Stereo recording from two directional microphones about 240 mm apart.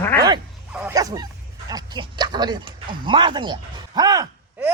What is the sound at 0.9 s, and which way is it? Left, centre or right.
Speech, centre.